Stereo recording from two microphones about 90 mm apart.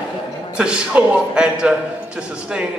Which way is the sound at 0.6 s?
10° right (ahead or behind).